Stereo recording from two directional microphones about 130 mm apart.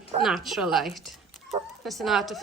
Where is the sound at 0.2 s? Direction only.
Centre (ahead or behind).